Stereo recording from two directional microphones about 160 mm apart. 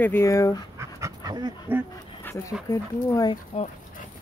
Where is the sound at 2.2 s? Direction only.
20° left (ahead or behind).